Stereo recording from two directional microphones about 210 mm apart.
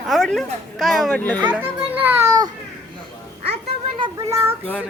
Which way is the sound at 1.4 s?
10° right (ahead or behind).